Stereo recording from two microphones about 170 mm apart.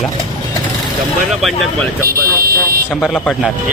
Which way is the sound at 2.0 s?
60° right (ahead or behind).